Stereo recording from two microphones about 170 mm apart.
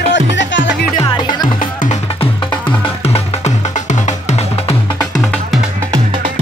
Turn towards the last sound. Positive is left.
turn(degrees=0)  # may be behind; listen again after turning